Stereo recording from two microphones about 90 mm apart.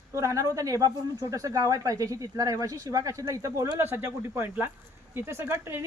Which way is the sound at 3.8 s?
25° right (ahead or behind).